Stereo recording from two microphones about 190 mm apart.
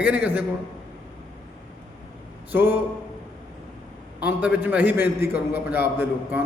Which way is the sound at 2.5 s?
10° right (ahead or behind).